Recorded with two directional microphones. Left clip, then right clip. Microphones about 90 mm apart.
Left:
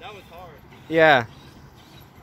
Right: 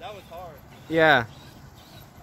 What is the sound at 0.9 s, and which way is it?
Speech, 5° left (ahead or behind).